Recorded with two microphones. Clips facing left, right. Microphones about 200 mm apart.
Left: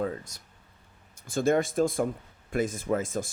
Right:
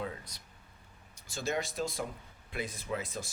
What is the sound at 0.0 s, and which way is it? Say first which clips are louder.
Speech: left 8 dB; 45° left (ahead or behind).